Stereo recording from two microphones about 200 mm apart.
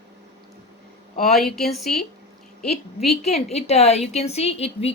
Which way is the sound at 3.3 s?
30° left (ahead or behind).